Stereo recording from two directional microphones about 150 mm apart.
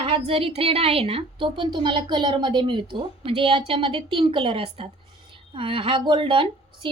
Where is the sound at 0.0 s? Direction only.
35° right (ahead or behind).